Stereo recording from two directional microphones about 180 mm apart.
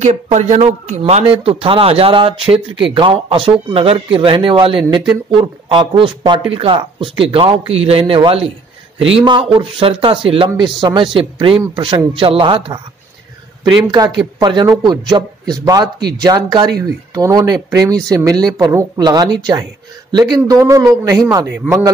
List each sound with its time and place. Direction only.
0.0 s speech: 40° right (ahead or behind)
13.8 s speech: 20° right (ahead or behind)